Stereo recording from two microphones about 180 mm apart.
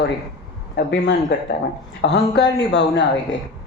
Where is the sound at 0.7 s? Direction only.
65° left (ahead or behind).